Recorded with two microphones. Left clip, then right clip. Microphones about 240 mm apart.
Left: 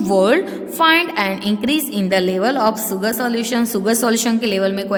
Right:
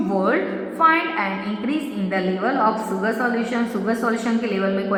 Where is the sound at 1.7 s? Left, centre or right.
Left.